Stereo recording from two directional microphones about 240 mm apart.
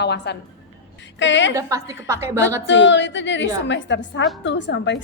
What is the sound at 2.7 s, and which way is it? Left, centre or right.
A woman's voice, left.